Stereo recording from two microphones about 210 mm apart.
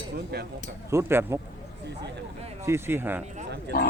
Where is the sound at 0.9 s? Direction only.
10° right (ahead or behind).